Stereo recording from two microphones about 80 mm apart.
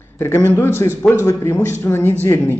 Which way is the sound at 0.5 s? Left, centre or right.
Left.